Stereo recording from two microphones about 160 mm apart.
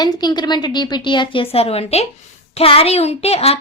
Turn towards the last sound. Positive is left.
turn(degrees=40)  # may be behind; listen again after turning